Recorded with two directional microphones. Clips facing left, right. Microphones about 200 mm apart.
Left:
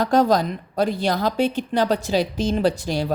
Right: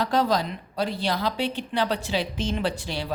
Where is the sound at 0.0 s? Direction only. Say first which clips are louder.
Left 5 dB; 45° left (ahead or behind).